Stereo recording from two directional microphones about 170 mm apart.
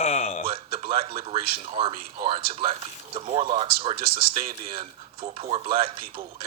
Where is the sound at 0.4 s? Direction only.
30° right (ahead or behind).